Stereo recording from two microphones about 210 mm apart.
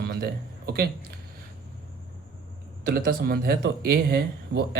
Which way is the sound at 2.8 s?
45° right (ahead or behind).